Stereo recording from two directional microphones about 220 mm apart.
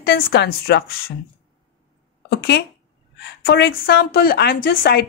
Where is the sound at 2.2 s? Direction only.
50° left (ahead or behind).